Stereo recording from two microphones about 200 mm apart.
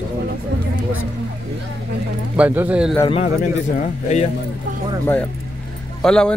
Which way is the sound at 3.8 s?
35° left (ahead or behind).